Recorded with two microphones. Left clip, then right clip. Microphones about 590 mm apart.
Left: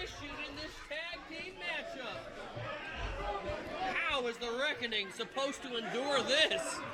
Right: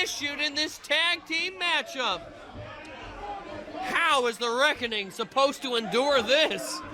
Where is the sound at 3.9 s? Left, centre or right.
Right.